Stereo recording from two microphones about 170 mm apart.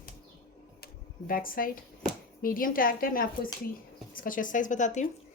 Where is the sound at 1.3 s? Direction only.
55° left (ahead or behind).